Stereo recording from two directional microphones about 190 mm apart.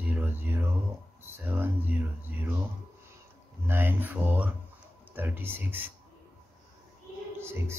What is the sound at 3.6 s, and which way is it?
Speech, 10° right (ahead or behind).